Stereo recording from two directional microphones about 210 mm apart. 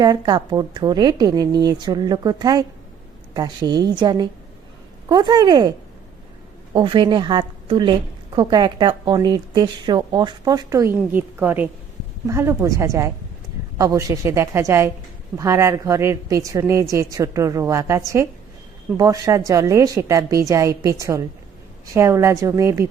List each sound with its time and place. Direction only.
0.0 s a woman's voice: 20° right (ahead or behind)
6.7 s a woman's voice: 20° right (ahead or behind)